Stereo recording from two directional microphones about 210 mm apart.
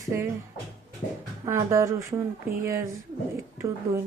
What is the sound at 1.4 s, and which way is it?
Speech, 15° right (ahead or behind).